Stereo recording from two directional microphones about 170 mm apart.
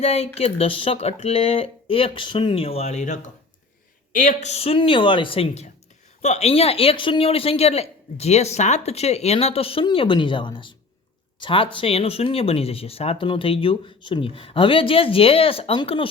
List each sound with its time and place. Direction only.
0.0 s speech: 40° left (ahead or behind)